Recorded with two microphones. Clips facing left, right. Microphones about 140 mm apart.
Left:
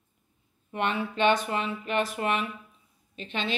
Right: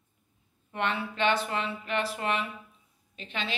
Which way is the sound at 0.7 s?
15° left (ahead or behind).